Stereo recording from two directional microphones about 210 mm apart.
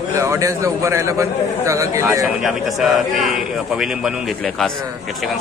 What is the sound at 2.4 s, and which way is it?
Speech, centre (ahead or behind).